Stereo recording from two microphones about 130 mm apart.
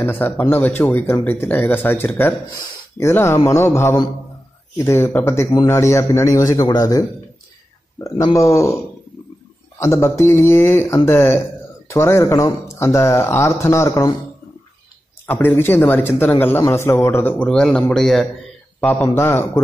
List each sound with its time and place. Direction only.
0.0 s a man's voice: 15° left (ahead or behind)
9.8 s a man's voice: 20° left (ahead or behind)
15.2 s speech: 15° left (ahead or behind)